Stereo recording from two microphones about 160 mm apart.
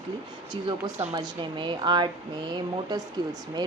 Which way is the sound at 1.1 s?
30° right (ahead or behind).